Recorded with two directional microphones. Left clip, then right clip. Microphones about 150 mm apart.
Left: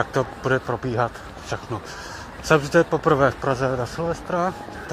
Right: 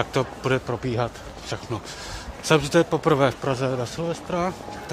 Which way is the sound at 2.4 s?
20° right (ahead or behind).